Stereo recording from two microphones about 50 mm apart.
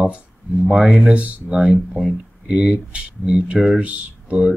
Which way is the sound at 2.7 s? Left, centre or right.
Right.